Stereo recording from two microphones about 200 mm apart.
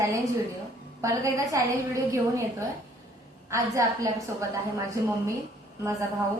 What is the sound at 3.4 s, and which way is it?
A woman's voice, 15° right (ahead or behind).